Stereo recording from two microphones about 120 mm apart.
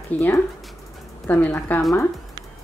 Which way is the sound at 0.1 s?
10° left (ahead or behind).